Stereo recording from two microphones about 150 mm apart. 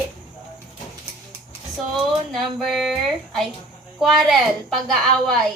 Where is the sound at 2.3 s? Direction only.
Centre (ahead or behind).